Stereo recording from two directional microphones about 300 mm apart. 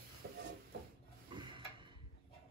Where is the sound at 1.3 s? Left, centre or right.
Centre.